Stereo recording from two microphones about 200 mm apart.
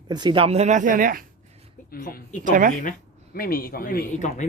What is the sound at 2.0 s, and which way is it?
Speech, 45° left (ahead or behind).